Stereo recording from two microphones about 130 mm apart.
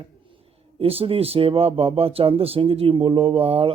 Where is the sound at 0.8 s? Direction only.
50° right (ahead or behind).